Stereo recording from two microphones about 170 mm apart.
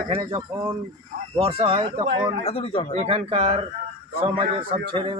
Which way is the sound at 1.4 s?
35° right (ahead or behind).